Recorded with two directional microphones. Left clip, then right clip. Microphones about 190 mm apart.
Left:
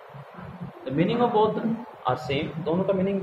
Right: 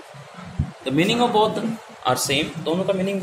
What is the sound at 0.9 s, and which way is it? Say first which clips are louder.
A man's voice: right 4 dB; 40° right (ahead or behind).